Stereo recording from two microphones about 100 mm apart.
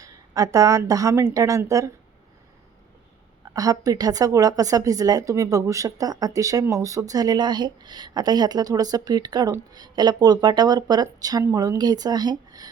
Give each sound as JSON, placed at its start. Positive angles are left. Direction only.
{"t": 0.0, "sound": "speech", "side_deg": -35}
{"t": 3.5, "sound": "a woman's voice", "side_deg": -35}